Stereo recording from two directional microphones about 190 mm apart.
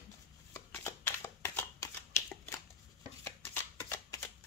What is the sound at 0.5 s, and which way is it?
Shuffling cards, 15° left (ahead or behind).